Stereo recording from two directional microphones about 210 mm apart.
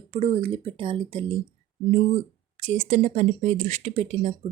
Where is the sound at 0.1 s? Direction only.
30° right (ahead or behind).